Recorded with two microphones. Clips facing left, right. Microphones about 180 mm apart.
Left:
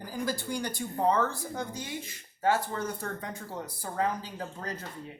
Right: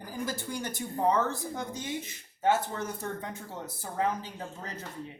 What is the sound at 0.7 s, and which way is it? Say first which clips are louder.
Speech: even; 20° right (ahead or behind).